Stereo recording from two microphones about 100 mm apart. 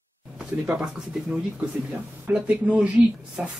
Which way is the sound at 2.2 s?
15° right (ahead or behind).